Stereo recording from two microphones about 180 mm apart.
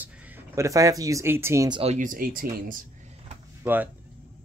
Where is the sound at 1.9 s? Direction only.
50° right (ahead or behind).